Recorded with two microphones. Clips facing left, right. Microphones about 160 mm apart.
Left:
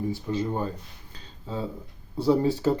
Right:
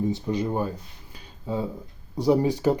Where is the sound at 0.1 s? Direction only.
15° right (ahead or behind).